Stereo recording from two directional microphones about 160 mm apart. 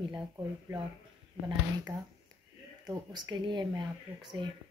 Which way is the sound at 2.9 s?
25° right (ahead or behind).